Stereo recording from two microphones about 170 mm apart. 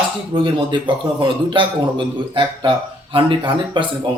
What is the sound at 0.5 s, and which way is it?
A man's voice, 30° right (ahead or behind).